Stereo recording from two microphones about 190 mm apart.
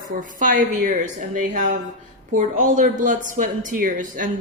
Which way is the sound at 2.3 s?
40° right (ahead or behind).